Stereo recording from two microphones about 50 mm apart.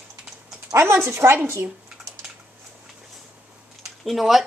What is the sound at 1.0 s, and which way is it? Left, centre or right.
Speech, right.